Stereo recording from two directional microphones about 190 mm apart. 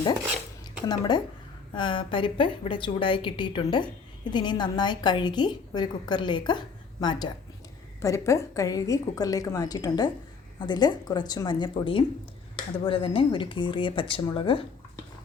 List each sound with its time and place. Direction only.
0.6 s dishes: 20° left (ahead or behind)
1.7 s a woman's voice: 25° left (ahead or behind)